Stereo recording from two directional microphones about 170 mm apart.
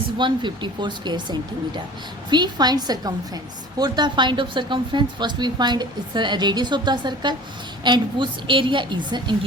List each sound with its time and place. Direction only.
0.2 s speech: 25° right (ahead or behind)